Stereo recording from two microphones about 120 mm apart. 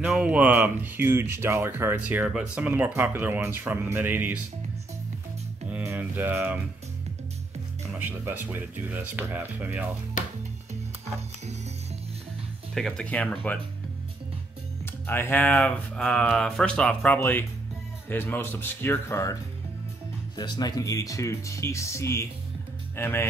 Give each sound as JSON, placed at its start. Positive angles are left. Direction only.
{"t": 0.1, "sound": "speech", "side_deg": -10}
{"t": 5.7, "sound": "mantra", "side_deg": -15}
{"t": 8.0, "sound": "speech", "side_deg": -15}
{"t": 12.7, "sound": "speech", "side_deg": 5}
{"t": 15.0, "sound": "speech", "side_deg": 20}
{"t": 17.2, "sound": "speech", "side_deg": 20}
{"t": 20.3, "sound": "speech", "side_deg": 35}